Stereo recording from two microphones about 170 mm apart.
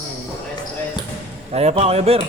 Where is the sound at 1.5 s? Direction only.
40° right (ahead or behind).